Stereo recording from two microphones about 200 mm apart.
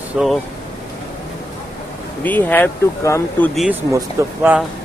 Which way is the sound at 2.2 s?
10° left (ahead or behind).